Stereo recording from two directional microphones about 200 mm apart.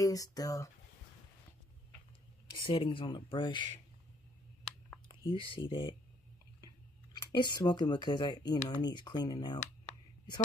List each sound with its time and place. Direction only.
0.0 s speech: 15° left (ahead or behind)
2.5 s speech: 25° left (ahead or behind)
5.3 s speech: 25° left (ahead or behind)
7.2 s speech: 20° left (ahead or behind)